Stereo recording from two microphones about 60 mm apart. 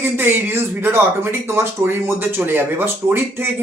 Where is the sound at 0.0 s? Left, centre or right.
Right.